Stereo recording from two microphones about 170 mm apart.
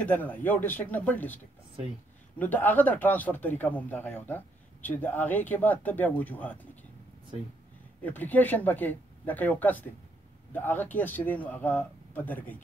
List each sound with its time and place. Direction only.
0.0 s speech: 10° left (ahead or behind)
8.0 s speech: 10° left (ahead or behind)